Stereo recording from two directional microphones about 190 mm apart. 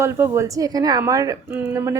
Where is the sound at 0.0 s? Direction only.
15° right (ahead or behind).